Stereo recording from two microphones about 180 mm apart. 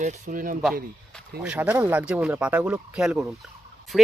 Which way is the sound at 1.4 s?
10° right (ahead or behind).